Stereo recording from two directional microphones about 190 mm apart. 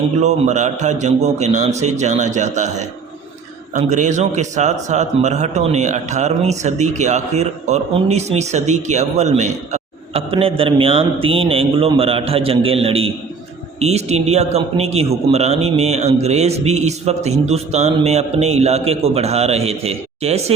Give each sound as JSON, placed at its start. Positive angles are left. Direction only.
{"t": 0.2, "sound": "a man's voice", "side_deg": -40}